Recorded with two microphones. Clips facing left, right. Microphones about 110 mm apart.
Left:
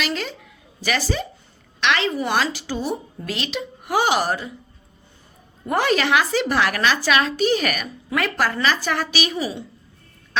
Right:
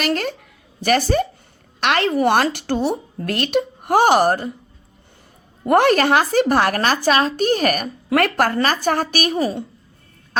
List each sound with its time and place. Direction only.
0.0 s a woman's voice: 50° right (ahead or behind)
5.6 s a woman's voice: 60° right (ahead or behind)